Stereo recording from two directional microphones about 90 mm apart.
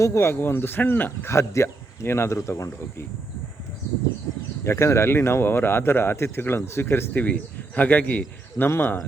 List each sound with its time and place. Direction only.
0.0 s speech: 30° left (ahead or behind)
4.6 s speech: 30° left (ahead or behind)